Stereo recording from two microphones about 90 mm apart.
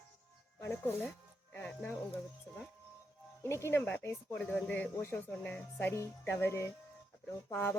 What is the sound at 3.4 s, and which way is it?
Speech, 30° left (ahead or behind).